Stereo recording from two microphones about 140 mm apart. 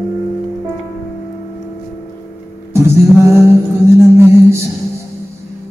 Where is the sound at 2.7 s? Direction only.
20° right (ahead or behind).